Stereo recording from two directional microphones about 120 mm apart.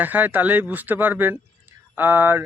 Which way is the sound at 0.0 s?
15° right (ahead or behind).